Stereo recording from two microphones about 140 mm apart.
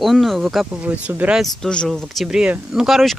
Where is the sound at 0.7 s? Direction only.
10° right (ahead or behind).